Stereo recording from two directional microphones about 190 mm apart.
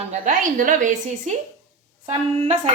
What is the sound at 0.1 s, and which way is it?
A woman's voice, 40° right (ahead or behind).